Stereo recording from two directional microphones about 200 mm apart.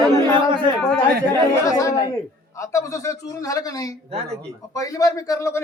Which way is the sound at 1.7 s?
15° left (ahead or behind).